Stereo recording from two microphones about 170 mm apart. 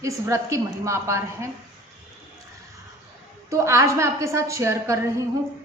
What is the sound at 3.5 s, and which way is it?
A woman's voice, 15° right (ahead or behind).